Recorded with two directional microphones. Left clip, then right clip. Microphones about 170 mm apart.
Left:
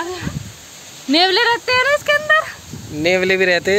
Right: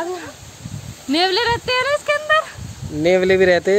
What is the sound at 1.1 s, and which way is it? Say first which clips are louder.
Speech: left 3 dB; 50° left (ahead or behind).